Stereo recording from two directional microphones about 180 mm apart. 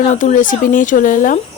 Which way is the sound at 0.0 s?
40° left (ahead or behind).